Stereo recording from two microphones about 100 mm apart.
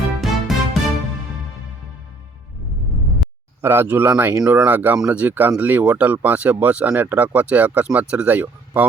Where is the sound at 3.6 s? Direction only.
20° right (ahead or behind).